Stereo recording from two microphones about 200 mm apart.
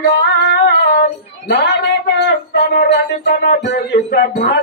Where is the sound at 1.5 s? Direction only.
55° left (ahead or behind).